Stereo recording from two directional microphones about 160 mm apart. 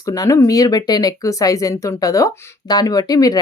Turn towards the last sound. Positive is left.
turn(degrees=25)  # may be behind; listen again after turning